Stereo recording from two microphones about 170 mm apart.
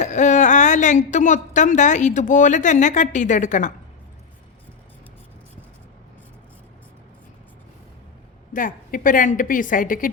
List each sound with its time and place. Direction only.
0.0 s a woman's voice: 45° left (ahead or behind)
8.5 s a woman's voice: 50° left (ahead or behind)